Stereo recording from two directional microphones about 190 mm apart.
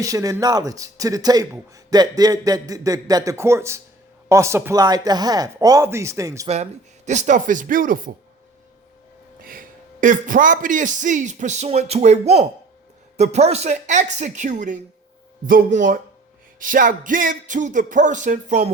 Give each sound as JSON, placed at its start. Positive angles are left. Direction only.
{"t": 0.0, "sound": "speech", "side_deg": -20}
{"t": 6.5, "sound": "music", "side_deg": -35}
{"t": 9.4, "sound": "a man's voice", "side_deg": -50}
{"t": 15.4, "sound": "music", "side_deg": -45}